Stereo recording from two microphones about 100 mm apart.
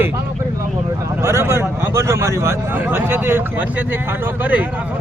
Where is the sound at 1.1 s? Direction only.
25° right (ahead or behind).